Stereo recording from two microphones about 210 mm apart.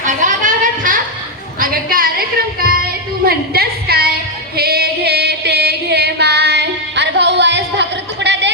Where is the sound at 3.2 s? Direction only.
45° right (ahead or behind).